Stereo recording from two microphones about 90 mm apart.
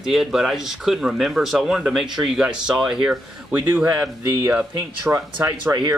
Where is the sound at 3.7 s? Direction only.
25° right (ahead or behind).